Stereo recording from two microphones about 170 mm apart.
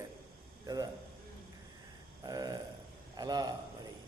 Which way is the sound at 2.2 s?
20° right (ahead or behind).